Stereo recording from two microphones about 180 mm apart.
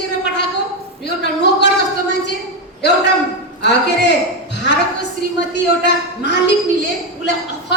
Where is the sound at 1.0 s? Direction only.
70° left (ahead or behind).